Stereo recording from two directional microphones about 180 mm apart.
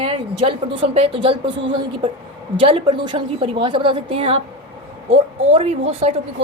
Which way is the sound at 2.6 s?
30° right (ahead or behind).